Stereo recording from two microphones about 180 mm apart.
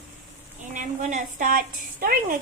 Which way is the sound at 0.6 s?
45° right (ahead or behind).